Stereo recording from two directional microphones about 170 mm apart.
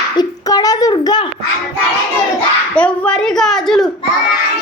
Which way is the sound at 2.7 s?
5° left (ahead or behind).